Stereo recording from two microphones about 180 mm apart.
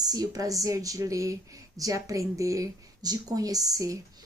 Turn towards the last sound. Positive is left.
turn(degrees=-20)  # may be behind; listen again after turning